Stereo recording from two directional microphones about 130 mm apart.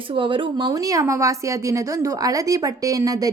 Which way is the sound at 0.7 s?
25° right (ahead or behind).